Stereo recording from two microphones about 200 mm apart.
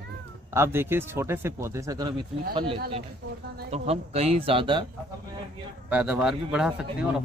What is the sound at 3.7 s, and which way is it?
Speech, 30° right (ahead or behind).